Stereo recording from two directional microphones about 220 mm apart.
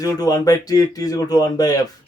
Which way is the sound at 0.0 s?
15° left (ahead or behind).